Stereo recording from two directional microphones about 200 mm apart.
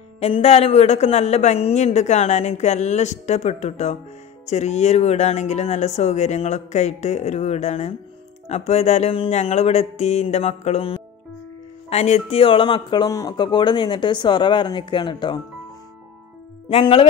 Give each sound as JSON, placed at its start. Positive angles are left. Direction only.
{"t": 0.2, "sound": "a woman's voice", "side_deg": 30}
{"t": 16.6, "sound": "speech", "side_deg": 25}